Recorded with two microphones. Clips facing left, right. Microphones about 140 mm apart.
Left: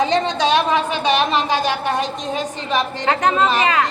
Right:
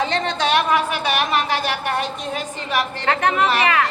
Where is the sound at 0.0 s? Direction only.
15° left (ahead or behind).